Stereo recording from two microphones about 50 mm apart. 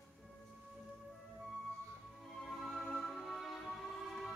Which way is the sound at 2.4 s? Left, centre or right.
Centre.